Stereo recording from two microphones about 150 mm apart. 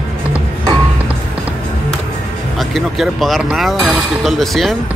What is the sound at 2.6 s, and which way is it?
Speech, centre (ahead or behind).